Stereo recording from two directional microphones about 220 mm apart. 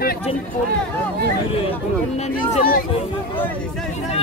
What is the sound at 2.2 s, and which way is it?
Speech, 35° left (ahead or behind).